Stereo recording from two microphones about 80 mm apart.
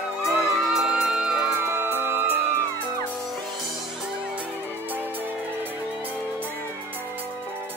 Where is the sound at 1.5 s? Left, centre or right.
Right.